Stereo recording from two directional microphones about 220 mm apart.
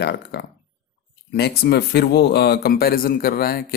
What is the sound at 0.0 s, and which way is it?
Speech, 50° left (ahead or behind).